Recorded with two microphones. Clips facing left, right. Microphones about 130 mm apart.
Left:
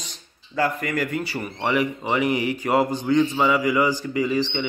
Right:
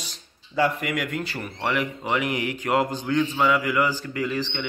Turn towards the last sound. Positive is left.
turn(degrees=10)  # may be behind; listen again after turning